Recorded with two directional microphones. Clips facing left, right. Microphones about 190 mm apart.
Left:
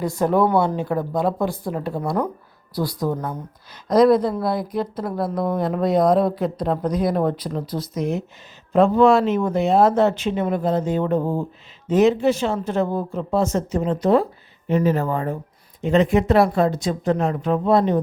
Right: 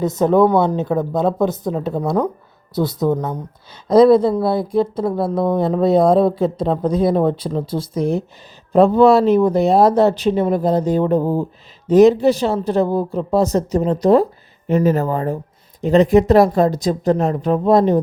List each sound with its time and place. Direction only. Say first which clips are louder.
0.0 s speech: right 5 dB; 20° right (ahead or behind); by 18.0 s 40° right (ahead or behind)